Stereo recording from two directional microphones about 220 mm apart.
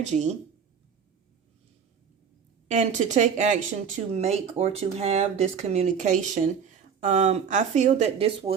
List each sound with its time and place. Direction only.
0.0 s speech: 30° right (ahead or behind)
2.6 s speech: 35° right (ahead or behind)